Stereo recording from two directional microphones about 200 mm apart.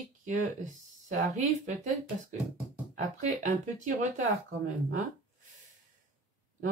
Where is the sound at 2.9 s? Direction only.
40° right (ahead or behind).